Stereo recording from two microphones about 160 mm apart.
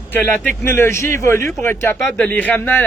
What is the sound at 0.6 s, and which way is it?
Speech, 15° left (ahead or behind).